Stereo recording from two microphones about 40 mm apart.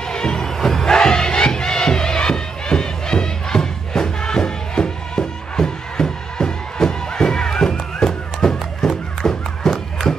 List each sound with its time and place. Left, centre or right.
0.1 s music: centre